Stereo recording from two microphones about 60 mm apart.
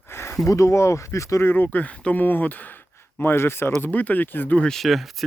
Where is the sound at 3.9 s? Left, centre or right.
Left.